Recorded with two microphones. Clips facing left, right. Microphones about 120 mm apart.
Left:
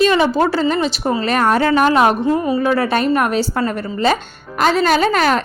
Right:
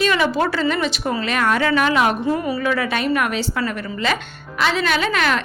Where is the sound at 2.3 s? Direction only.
20° left (ahead or behind).